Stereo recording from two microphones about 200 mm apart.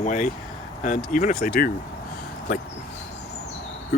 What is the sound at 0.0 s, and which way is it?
Speech, 40° left (ahead or behind).